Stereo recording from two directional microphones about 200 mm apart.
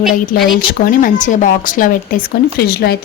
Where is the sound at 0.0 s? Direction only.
Centre (ahead or behind).